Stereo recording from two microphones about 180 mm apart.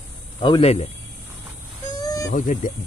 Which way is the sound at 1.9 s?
20° left (ahead or behind).